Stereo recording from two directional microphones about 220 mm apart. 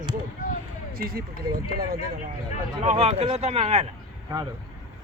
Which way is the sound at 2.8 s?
30° right (ahead or behind).